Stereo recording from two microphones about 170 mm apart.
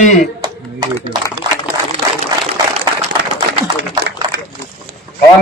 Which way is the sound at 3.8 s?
90° right.